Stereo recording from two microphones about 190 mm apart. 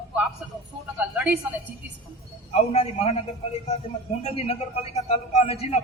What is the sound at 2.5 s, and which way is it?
Speech, 30° left (ahead or behind).